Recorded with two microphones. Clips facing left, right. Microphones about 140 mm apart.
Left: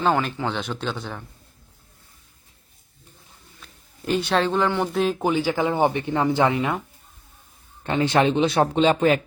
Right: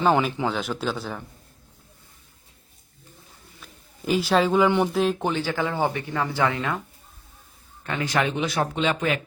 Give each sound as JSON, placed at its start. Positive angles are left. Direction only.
{"t": 0.0, "sound": "speech", "side_deg": -5}
{"t": 3.6, "sound": "a sound", "side_deg": -5}
{"t": 4.9, "sound": "speech", "side_deg": 0}
{"t": 5.3, "sound": "speech", "side_deg": 10}
{"t": 7.9, "sound": "speech", "side_deg": 25}